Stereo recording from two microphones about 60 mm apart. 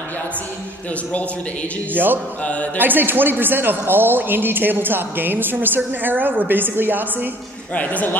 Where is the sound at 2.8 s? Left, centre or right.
Right.